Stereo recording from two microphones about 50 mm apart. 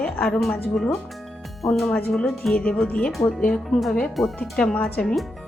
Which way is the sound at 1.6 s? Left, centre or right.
Centre.